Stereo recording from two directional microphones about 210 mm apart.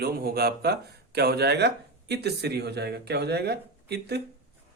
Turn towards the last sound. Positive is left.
turn(degrees=-50)  # may be behind; listen again after turning